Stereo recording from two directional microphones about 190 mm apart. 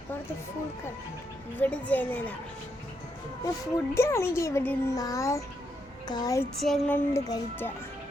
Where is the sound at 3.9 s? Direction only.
15° left (ahead or behind).